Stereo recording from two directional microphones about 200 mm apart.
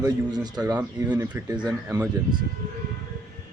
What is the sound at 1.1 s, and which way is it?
Speech, 10° right (ahead or behind).